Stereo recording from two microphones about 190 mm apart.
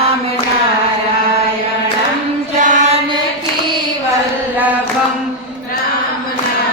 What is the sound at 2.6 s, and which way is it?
Mantra, 40° right (ahead or behind).